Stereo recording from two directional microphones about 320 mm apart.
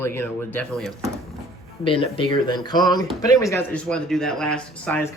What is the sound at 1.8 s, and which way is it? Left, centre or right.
Speech, centre.